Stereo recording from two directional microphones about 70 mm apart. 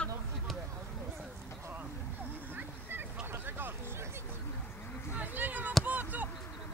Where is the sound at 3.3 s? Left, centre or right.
Right.